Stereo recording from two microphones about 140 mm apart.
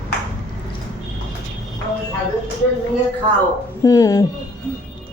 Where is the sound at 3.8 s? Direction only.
25° left (ahead or behind).